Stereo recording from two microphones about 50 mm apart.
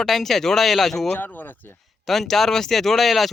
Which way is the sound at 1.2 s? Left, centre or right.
Left.